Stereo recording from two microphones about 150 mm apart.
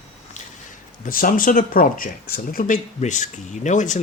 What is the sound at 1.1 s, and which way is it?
Speech, 70° left (ahead or behind).